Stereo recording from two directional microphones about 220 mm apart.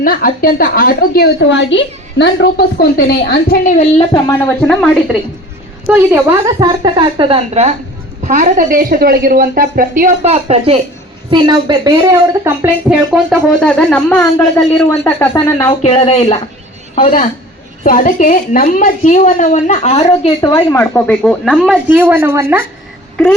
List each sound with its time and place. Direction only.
0.0 s a woman's voice: 40° left (ahead or behind); by 4.4 s 25° left (ahead or behind)
4.4 s speech: 5° left (ahead or behind)
5.9 s a woman's voice: 10° right (ahead or behind); by 15.8 s 15° left (ahead or behind)
15.8 s speech: 25° left (ahead or behind)
16.9 s a woman's voice: 35° left (ahead or behind); by 22.6 s 10° right (ahead or behind)